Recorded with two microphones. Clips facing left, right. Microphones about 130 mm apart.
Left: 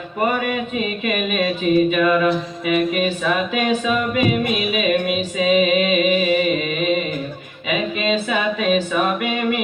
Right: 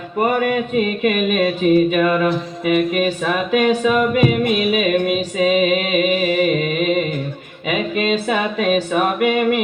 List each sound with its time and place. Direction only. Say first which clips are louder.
0.3 s mantra: right 5 dB; 45° right (ahead or behind)